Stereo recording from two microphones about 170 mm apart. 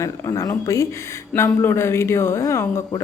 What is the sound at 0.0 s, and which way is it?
A woman's voice, 15° left (ahead or behind).